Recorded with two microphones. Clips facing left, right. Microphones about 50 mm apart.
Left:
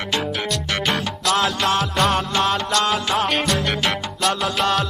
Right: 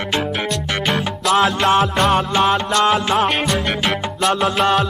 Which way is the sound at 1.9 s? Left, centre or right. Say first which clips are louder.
Right 3 dB; centre.